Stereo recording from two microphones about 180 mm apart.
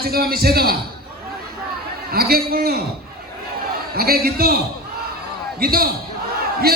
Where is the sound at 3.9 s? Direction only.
60° right (ahead or behind).